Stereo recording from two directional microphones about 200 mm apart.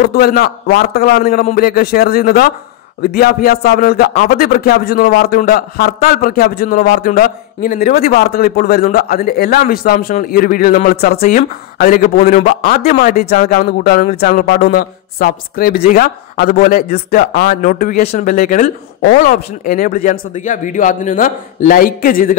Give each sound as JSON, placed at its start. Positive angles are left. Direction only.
{"t": 0.0, "sound": "speech", "side_deg": 50}